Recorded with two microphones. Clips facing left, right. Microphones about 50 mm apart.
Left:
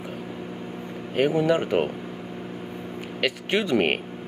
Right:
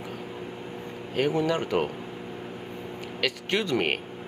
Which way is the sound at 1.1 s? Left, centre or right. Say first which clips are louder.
Left 4 dB; centre.